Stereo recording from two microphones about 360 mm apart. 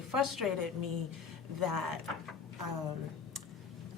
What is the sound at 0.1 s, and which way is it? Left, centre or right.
A woman's voice, right.